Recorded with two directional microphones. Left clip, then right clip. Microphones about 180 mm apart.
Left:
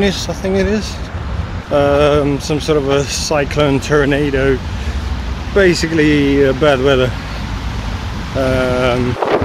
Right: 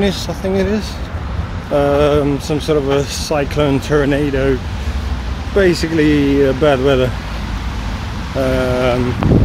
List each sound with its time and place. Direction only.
0.0 s speech: 10° right (ahead or behind)
5.6 s speech: 5° right (ahead or behind)
8.5 s speech: 5° right (ahead or behind)